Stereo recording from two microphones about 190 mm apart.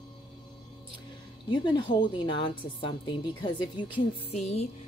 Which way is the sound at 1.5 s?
25° left (ahead or behind).